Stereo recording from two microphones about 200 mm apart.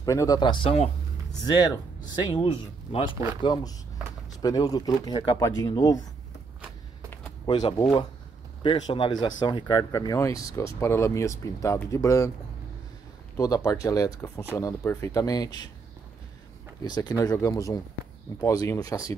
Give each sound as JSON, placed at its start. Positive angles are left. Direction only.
{"t": 0.0, "sound": "speech", "side_deg": 15}
{"t": 7.4, "sound": "speech", "side_deg": 20}
{"t": 13.4, "sound": "speech", "side_deg": 15}
{"t": 16.8, "sound": "speech", "side_deg": 20}